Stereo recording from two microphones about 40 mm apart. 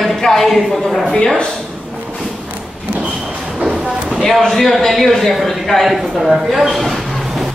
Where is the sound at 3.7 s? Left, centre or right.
Right.